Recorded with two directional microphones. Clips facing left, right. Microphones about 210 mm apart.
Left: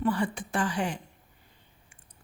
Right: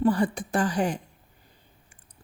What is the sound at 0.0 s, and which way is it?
Speech, 40° right (ahead or behind).